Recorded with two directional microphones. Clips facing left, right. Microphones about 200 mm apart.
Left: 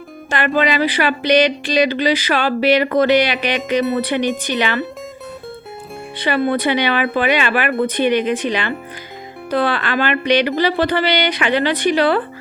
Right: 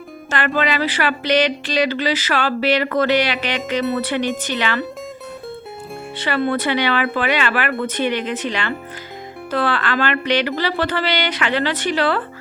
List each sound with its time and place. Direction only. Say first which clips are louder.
0.3 s speech: left 3 dB; 15° left (ahead or behind)
6.1 s speech: left 3 dB; 15° left (ahead or behind)